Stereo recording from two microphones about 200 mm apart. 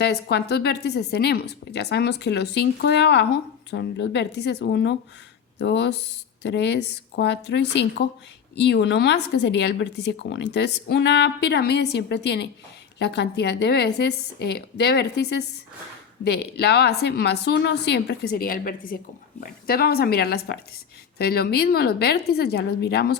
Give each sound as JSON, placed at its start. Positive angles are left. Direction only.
{"t": 0.0, "sound": "a woman's voice", "side_deg": 55}